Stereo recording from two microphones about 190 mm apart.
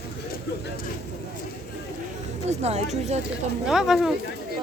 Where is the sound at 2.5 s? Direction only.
35° right (ahead or behind).